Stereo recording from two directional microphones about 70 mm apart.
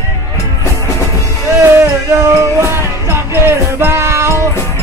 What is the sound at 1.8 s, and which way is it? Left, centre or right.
Music, right.